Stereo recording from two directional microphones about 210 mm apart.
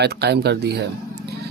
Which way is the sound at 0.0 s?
50° right (ahead or behind).